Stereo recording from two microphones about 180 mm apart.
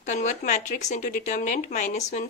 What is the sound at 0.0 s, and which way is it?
Speech, 40° left (ahead or behind).